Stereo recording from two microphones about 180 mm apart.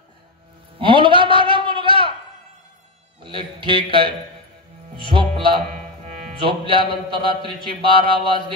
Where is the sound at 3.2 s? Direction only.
30° right (ahead or behind).